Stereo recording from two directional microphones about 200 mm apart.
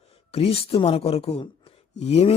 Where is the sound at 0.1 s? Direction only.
30° left (ahead or behind).